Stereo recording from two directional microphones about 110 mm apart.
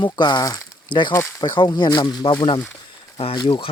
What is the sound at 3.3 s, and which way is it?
Speech, 50° left (ahead or behind).